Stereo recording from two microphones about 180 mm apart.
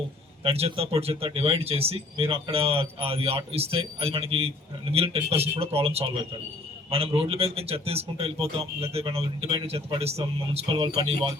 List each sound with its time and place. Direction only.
0.4 s speech: 35° right (ahead or behind)